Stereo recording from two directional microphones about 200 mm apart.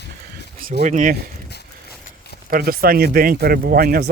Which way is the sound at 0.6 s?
40° right (ahead or behind).